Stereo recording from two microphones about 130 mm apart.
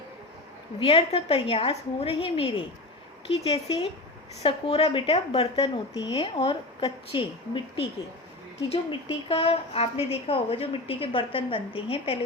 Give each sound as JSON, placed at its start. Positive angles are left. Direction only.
{"t": 0.8, "sound": "a woman's voice", "side_deg": 45}
{"t": 5.9, "sound": "speech", "side_deg": 25}
{"t": 6.1, "sound": "a woman's voice", "side_deg": 45}